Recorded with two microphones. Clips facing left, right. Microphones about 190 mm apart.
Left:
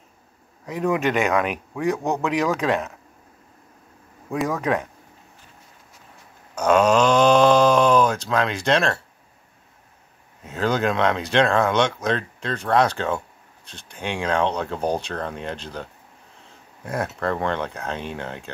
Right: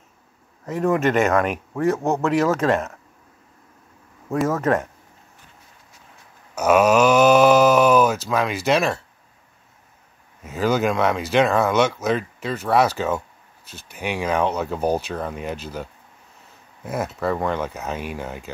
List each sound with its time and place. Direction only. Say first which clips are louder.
0.9 s speech: right 3 dB; centre (ahead or behind)
4.3 s speech: right 3 dB; centre (ahead or behind)
6.5 s speech: right 1 dB; 5° right (ahead or behind)
10.4 s speech: right 2 dB; 5° right (ahead or behind)